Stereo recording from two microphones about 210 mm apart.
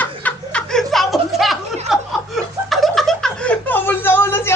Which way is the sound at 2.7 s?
Centre (ahead or behind).